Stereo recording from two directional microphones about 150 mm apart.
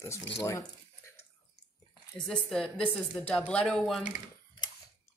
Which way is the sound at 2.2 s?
5° left (ahead or behind).